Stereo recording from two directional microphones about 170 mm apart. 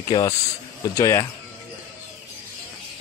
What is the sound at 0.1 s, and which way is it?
Speech, 25° left (ahead or behind).